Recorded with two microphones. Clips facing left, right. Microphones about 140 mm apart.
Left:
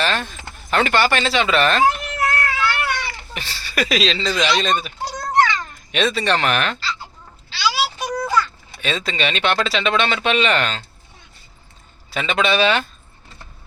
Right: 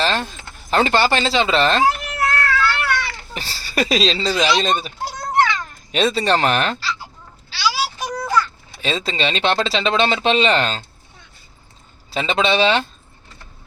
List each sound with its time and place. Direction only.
0.0 s a sound: 30° right (ahead or behind)
0.7 s speech: 30° right (ahead or behind)
1.8 s baby cry: 25° left (ahead or behind)
3.3 s speech: 35° right (ahead or behind)
4.3 s a man's voice: 5° right (ahead or behind)
4.6 s speech: 30° right (ahead or behind)
7.6 s a sound: centre (ahead or behind)
8.8 s speech: 30° right (ahead or behind)
12.1 s speech: 30° right (ahead or behind)